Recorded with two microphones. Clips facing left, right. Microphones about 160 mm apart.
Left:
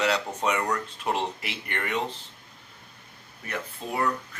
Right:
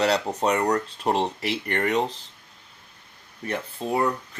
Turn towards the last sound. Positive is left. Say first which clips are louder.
# right 4 dB
turn(degrees=-30)  # may be behind; listen again after turning